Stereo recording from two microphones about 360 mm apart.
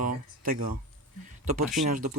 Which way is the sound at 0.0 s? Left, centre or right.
Right.